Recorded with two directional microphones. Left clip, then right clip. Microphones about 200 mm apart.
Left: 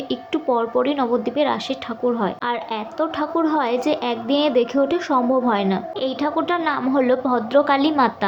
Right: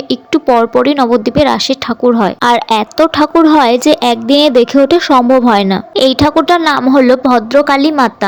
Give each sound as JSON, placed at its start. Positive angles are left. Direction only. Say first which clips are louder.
{"t": 0.1, "sound": "a woman's voice", "louder": "right 12 dB", "side_deg": -50}